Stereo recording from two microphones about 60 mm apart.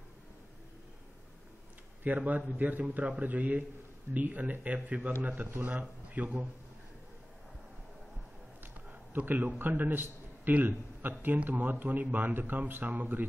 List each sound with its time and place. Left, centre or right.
2.0 s a man's voice: right
9.1 s speech: right
10.0 s a sound: right
11.0 s speech: right